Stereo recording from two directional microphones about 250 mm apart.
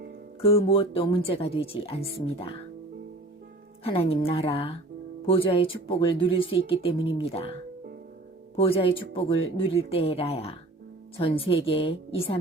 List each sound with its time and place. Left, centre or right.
0.4 s speech: left
3.8 s speech: left
8.5 s speech: left